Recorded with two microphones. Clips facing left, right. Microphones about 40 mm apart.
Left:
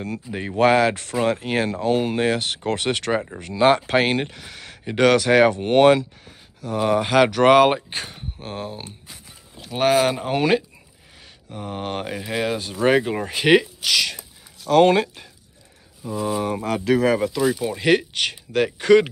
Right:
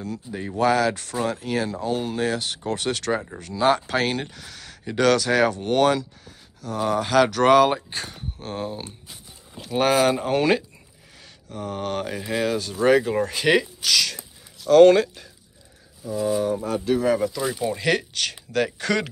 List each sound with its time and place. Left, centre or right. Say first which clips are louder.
0.0 s speech: left 2 dB; left
2.9 s speech: left 1 dB; left
8.4 s speech: right 1 dB; centre
11.1 s mantra: right 1 dB; centre
12.2 s speech: even; centre
16.4 s speech: left 2 dB; left
17.1 s speech: left 1 dB; left
17.4 s speech: left 4 dB; centre
17.7 s speech: left 4 dB; left